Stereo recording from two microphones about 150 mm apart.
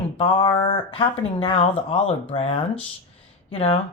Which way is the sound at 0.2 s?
40° left (ahead or behind).